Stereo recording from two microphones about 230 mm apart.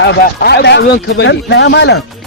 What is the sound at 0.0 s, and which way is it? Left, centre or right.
Speech, left.